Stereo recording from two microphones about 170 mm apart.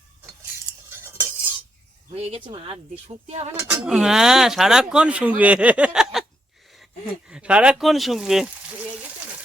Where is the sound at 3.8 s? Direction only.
5° right (ahead or behind).